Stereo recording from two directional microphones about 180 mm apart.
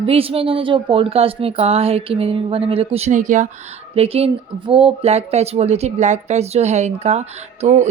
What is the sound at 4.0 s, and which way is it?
Speech, 35° right (ahead or behind).